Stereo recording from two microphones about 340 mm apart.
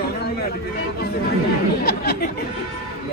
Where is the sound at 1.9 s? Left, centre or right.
Left.